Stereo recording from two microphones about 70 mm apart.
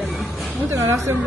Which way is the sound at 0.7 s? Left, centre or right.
Right.